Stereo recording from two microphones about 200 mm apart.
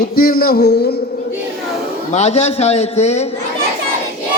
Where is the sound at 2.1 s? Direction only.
35° left (ahead or behind).